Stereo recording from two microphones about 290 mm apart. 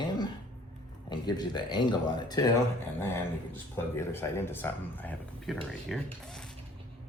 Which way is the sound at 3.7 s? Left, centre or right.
Centre.